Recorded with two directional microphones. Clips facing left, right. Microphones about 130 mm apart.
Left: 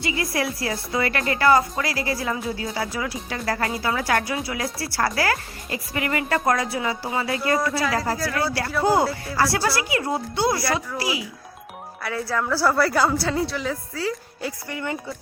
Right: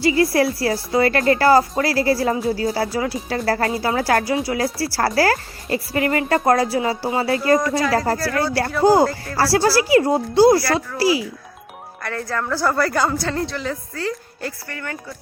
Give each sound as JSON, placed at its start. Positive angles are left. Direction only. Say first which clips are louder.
{"t": 0.0, "sound": "a woman's voice", "louder": "right 9 dB", "side_deg": -35}
{"t": 8.1, "sound": "a woman's voice", "louder": "right 4 dB", "side_deg": 0}
{"t": 8.8, "sound": "a woman's voice", "louder": "right 5 dB", "side_deg": -30}
{"t": 12.0, "sound": "a woman's voice", "louder": "even", "side_deg": 5}
{"t": 14.7, "sound": "speech", "louder": "left 2 dB", "side_deg": 20}